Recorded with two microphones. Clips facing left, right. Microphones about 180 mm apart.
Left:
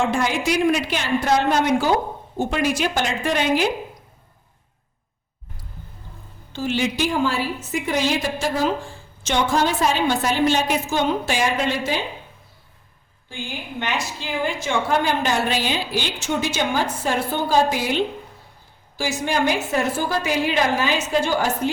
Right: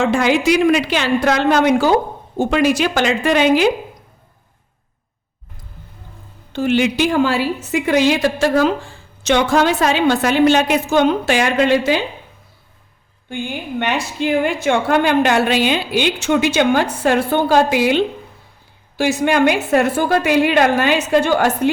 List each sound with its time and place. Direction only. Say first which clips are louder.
0.0 s a woman's voice: right 6 dB; 85° right
6.5 s a woman's voice: right 7 dB; 60° right (ahead or behind)
13.3 s a woman's voice: right 8 dB; 60° right (ahead or behind)